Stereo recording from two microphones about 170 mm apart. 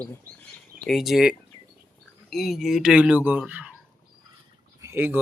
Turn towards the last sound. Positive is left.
turn(degrees=-10)  # may be behind; listen again after turning